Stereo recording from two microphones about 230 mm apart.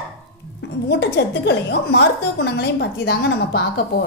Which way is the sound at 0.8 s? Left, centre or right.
Left.